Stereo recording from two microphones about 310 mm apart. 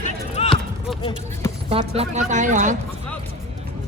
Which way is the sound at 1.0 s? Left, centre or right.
Centre.